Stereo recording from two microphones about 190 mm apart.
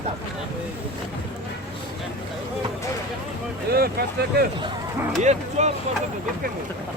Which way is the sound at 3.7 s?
55° right (ahead or behind).